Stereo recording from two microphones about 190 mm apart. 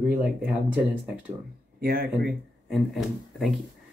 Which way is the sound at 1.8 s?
50° right (ahead or behind).